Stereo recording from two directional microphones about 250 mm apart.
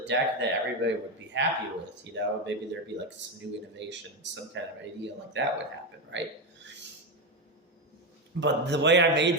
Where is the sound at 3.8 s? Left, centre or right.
Right.